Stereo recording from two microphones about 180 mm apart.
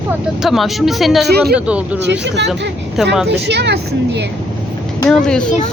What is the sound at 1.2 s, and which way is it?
Speech, 60° right (ahead or behind).